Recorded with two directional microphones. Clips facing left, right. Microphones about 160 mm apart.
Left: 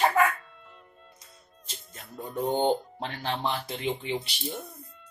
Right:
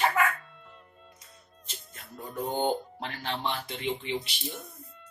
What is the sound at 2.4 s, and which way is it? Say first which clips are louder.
Speech: left 3 dB; 25° left (ahead or behind).